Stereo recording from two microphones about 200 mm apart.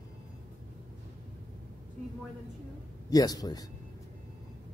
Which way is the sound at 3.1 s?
20° left (ahead or behind).